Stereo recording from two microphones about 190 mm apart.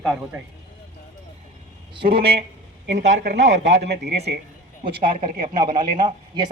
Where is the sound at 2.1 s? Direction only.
30° right (ahead or behind).